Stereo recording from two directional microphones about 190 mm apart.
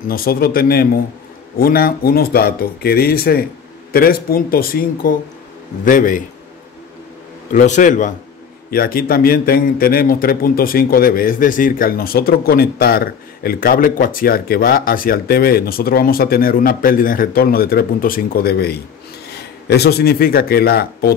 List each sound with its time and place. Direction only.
0.1 s a man's voice: 50° left (ahead or behind)
7.5 s a man's voice: 40° left (ahead or behind)